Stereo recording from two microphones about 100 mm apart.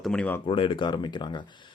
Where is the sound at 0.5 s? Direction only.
55° left (ahead or behind).